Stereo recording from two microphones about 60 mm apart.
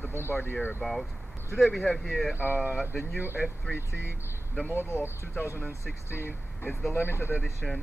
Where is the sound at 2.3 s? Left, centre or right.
Right.